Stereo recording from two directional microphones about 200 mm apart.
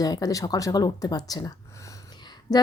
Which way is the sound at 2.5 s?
20° left (ahead or behind).